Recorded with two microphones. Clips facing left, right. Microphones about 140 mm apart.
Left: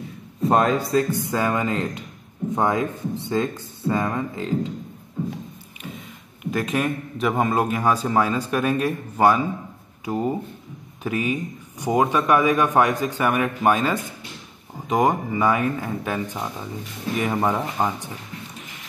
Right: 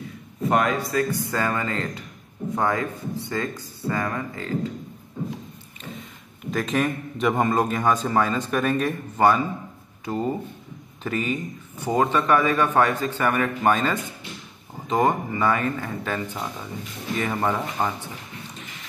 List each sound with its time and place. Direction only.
0.4 s a man's voice: 30° left (ahead or behind)
6.5 s a man's voice: 5° left (ahead or behind)